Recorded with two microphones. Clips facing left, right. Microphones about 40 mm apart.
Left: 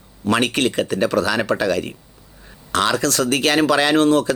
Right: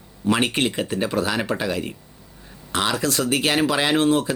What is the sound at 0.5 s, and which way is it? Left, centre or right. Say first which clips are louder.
Speech: left 3 dB; left.